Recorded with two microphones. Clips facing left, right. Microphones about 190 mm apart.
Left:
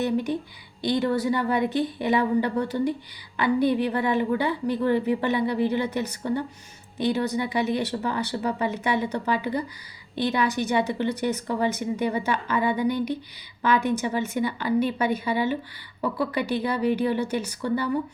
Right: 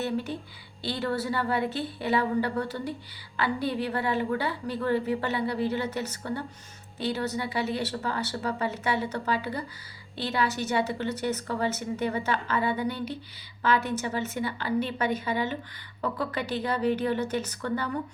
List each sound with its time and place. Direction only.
0.0 s a woman's voice: 15° left (ahead or behind)